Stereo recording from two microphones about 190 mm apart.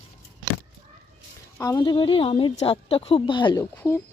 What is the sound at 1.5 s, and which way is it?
A woman's voice, 15° left (ahead or behind).